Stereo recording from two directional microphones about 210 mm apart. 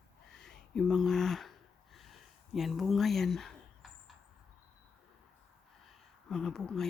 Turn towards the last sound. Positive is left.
turn(degrees=0)  # may be behind; listen again after turning